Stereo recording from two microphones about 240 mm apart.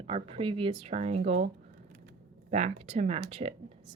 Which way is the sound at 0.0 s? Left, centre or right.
Right.